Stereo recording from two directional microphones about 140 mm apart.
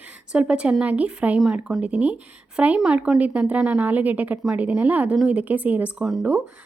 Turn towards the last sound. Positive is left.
turn(degrees=-10)  # may be behind; listen again after turning